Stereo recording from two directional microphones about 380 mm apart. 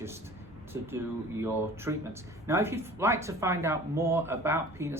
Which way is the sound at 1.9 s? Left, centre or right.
Centre.